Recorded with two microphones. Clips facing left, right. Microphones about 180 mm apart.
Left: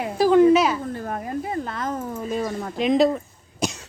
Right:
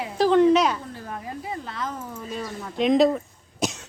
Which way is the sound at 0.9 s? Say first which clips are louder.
Left 6 dB; 55° left (ahead or behind).